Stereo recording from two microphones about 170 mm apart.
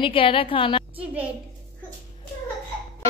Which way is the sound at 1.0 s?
5° right (ahead or behind).